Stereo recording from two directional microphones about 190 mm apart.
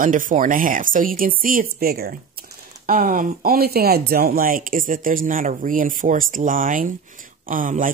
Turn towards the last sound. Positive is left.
turn(degrees=-45)  # may be behind; listen again after turning